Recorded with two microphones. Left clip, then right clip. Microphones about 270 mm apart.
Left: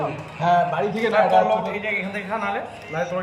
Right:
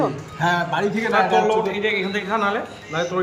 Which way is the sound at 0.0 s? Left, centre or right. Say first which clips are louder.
Right 2 dB; right.